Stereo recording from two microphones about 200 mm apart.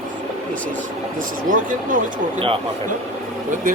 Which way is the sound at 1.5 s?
45° right (ahead or behind).